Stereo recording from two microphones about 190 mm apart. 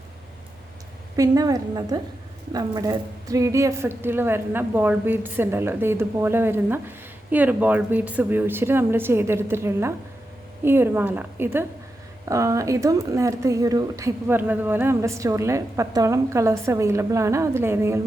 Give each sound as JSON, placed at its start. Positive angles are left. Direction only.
{"t": 1.1, "sound": "a woman's voice", "side_deg": -20}